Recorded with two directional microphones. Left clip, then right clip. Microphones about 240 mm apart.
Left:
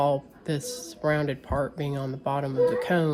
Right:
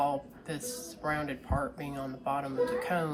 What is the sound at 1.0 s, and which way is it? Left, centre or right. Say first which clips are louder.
Speech: left 7 dB; left.